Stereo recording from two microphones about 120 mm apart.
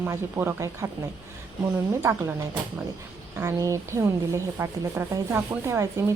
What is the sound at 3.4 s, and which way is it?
Speech, 25° right (ahead or behind).